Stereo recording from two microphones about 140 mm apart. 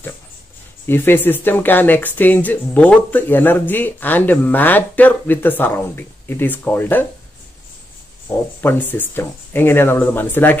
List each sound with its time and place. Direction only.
0.8 s speech: 15° left (ahead or behind)
8.5 s speech: 15° left (ahead or behind)